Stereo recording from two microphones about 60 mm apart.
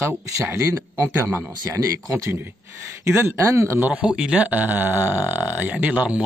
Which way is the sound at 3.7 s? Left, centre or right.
Right.